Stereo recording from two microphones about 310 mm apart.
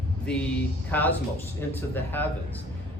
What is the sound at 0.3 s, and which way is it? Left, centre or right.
Speech, centre.